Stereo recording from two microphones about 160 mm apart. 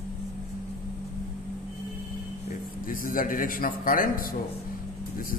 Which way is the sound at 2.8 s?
60° left (ahead or behind).